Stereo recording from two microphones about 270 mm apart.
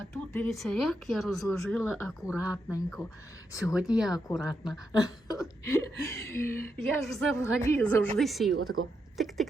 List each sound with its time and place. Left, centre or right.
0.1 s speech: centre
4.9 s speech: centre
8.5 s a woman's voice: right
9.1 s speech: centre